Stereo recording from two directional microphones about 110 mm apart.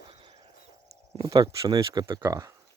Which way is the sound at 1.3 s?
35° right (ahead or behind).